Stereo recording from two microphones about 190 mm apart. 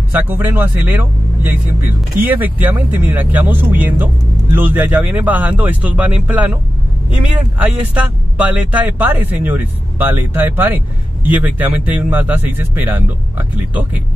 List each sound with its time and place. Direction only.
0.1 s speech: 10° right (ahead or behind)